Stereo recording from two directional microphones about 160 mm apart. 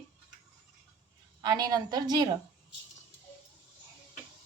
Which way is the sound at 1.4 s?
25° right (ahead or behind).